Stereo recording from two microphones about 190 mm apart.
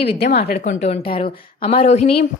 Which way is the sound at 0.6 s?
35° left (ahead or behind).